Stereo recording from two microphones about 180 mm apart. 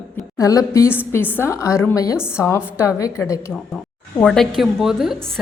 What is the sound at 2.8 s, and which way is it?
Speech, 15° left (ahead or behind).